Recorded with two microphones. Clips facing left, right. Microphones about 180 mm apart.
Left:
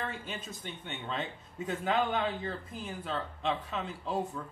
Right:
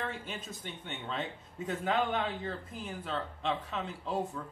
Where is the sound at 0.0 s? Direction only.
Centre (ahead or behind).